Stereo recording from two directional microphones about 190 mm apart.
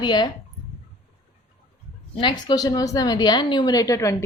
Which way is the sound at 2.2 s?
25° left (ahead or behind).